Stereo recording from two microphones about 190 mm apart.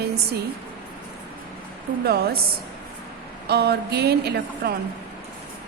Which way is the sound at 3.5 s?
60° right (ahead or behind).